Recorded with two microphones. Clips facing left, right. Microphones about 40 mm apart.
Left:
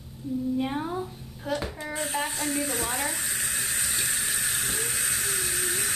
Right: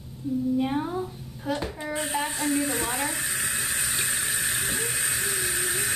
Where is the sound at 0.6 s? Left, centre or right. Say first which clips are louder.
Right 2 dB; centre.